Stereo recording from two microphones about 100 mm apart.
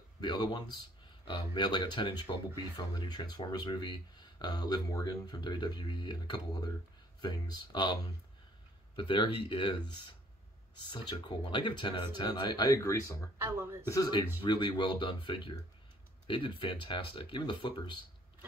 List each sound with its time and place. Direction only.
0.2 s speech: 45° left (ahead or behind); by 13.3 s 30° left (ahead or behind)
13.4 s speech: 25° right (ahead or behind)
13.8 s speech: 40° left (ahead or behind)
14.4 s speech: 50° left (ahead or behind)